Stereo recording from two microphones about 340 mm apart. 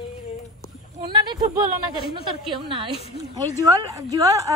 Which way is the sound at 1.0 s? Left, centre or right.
Centre.